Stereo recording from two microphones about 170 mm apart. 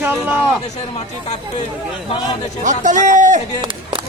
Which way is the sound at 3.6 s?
30° right (ahead or behind).